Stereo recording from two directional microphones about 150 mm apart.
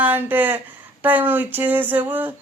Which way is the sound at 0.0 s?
15° right (ahead or behind).